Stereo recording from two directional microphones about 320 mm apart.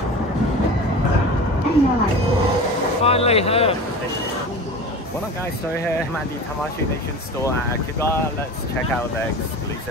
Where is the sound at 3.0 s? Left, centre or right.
Centre.